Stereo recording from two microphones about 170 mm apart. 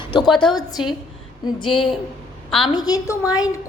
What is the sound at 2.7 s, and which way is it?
Speech, 25° left (ahead or behind).